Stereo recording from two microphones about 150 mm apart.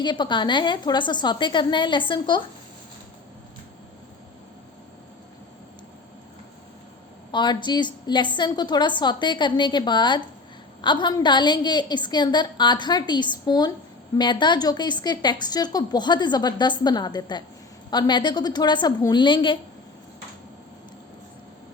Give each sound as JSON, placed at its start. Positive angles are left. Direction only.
{"t": 0.0, "sound": "a woman's voice", "side_deg": 30}
{"t": 7.3, "sound": "a woman's voice", "side_deg": 30}